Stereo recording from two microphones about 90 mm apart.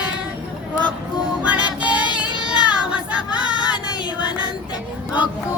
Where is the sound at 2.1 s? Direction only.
10° right (ahead or behind).